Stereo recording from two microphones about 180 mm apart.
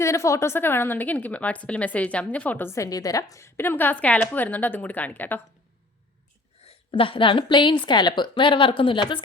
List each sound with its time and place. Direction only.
0.0 s a woman's voice: 15° left (ahead or behind)
6.7 s speech: 30° left (ahead or behind)